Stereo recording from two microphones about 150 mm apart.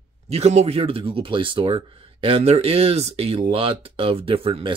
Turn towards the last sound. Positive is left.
turn(degrees=-40)  # may be behind; listen again after turning